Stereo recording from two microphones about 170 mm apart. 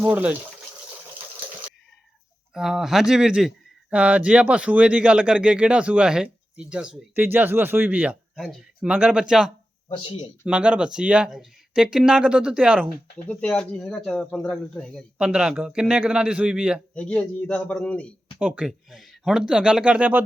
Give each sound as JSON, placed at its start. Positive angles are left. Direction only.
{"t": 0.0, "sound": "speech", "side_deg": -10}
{"t": 2.5, "sound": "speech", "side_deg": 0}
{"t": 9.9, "sound": "speech", "side_deg": 35}
{"t": 10.4, "sound": "speech", "side_deg": -5}
{"t": 13.2, "sound": "speech", "side_deg": 5}
{"t": 16.9, "sound": "a man's voice", "side_deg": 5}
{"t": 18.3, "sound": "speech", "side_deg": -5}